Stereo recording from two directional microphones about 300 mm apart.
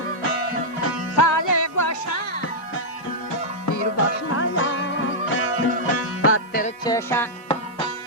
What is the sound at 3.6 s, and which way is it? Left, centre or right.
Music, left.